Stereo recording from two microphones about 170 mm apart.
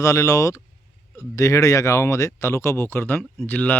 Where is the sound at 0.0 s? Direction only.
20° left (ahead or behind).